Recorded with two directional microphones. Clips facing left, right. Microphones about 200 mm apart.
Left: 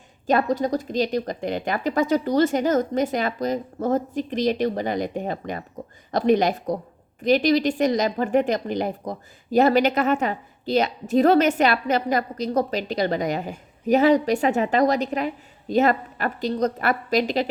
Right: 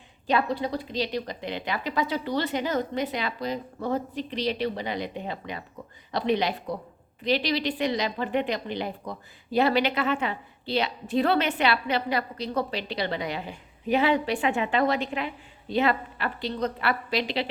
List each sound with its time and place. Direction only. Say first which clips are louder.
0.3 s a woman's voice: left 5 dB; 45° left (ahead or behind)